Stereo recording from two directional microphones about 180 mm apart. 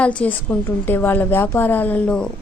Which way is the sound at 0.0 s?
5° left (ahead or behind).